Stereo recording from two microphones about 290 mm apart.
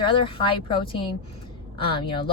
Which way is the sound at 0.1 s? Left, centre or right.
Centre.